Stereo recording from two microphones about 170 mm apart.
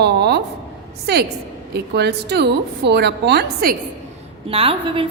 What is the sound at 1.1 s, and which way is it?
A woman's voice, 75° right (ahead or behind).